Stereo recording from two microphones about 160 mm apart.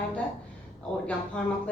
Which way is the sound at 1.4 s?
5° left (ahead or behind).